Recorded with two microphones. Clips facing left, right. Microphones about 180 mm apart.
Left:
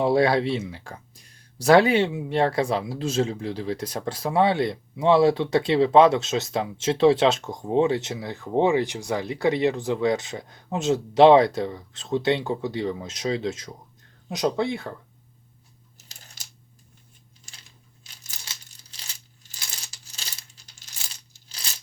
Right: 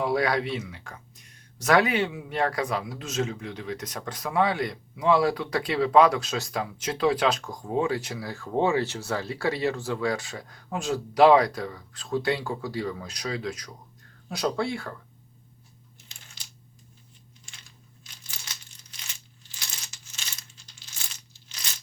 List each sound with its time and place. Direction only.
0.0 s speech: 30° left (ahead or behind)
16.0 s coin: 40° left (ahead or behind)
17.5 s coin: 40° left (ahead or behind)
21.3 s a sound: 35° left (ahead or behind)